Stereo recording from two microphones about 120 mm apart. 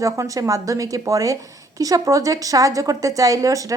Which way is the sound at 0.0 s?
25° right (ahead or behind).